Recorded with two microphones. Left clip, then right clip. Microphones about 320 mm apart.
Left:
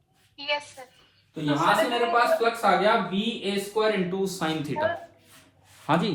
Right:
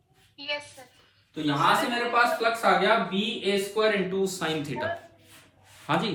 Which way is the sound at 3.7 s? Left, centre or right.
Centre.